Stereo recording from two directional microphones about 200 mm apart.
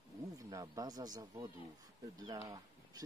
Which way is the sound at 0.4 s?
15° right (ahead or behind).